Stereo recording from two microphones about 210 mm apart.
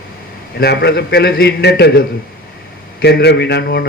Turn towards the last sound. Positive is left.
turn(degrees=50)  # may be behind; listen again after turning